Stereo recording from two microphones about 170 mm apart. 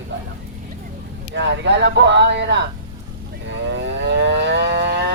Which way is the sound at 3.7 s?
85° right.